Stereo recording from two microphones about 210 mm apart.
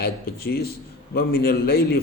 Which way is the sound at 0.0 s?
45° left (ahead or behind).